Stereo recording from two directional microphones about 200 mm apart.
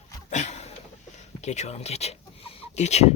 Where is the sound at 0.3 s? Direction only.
35° left (ahead or behind).